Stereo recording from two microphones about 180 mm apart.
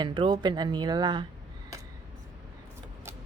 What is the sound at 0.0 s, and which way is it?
A woman's voice, 25° right (ahead or behind).